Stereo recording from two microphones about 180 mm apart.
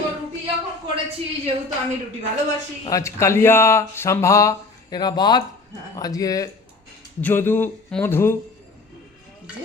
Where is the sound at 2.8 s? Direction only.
15° left (ahead or behind).